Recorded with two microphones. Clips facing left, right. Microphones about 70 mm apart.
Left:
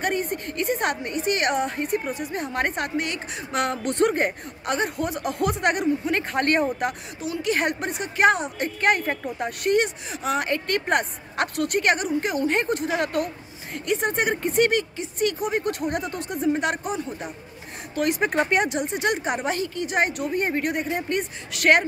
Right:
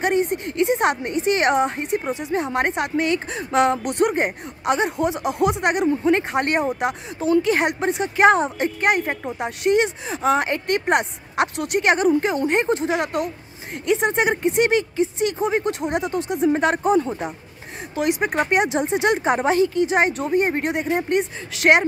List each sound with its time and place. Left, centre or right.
0.0 s a sound: centre
0.5 s a woman's voice: right
7.2 s a woman's voice: right
8.8 s a woman's voice: centre
16.4 s speech: right
17.9 s speech: centre
18.8 s a woman's voice: right